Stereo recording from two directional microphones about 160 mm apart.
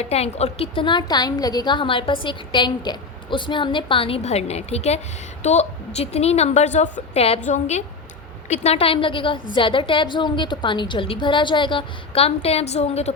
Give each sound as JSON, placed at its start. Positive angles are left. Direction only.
{"t": 0.0, "sound": "a woman's voice", "side_deg": 40}